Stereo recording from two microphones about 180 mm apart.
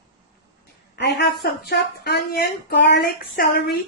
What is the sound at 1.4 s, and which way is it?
Speech, 60° left (ahead or behind).